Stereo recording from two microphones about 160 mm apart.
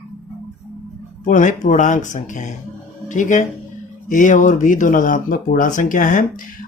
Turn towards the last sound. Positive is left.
turn(degrees=55)  # may be behind; listen again after turning